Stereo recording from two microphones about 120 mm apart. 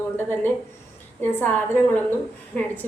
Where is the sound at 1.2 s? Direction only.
15° left (ahead or behind).